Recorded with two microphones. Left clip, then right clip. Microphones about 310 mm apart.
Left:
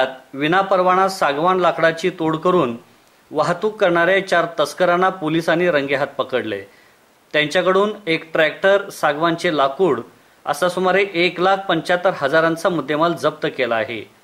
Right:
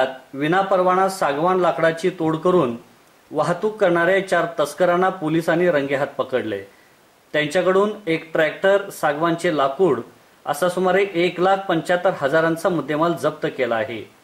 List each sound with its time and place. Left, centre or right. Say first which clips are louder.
0.0 s speech: left 2 dB; centre
3.5 s speech: left 1 dB; right
3.8 s a man's voice: left 2 dB; centre